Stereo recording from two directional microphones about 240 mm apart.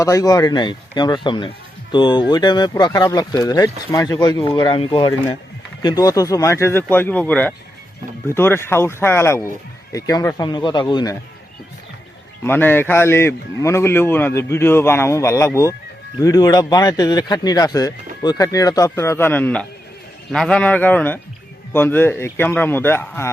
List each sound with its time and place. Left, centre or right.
0.0 s speech: centre
12.4 s speech: centre